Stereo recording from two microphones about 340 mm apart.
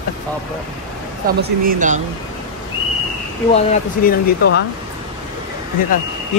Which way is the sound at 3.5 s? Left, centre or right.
Centre.